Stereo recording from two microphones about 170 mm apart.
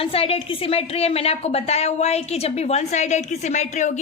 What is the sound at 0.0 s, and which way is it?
A woman's voice, 35° left (ahead or behind).